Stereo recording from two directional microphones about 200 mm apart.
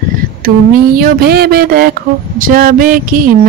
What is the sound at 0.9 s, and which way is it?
Speech, 50° right (ahead or behind).